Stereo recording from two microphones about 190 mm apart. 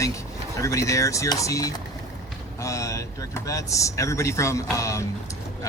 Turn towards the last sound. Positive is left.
turn(degrees=15)  # may be behind; listen again after turning